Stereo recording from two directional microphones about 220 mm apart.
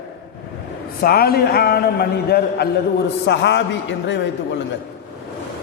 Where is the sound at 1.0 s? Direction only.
45° left (ahead or behind).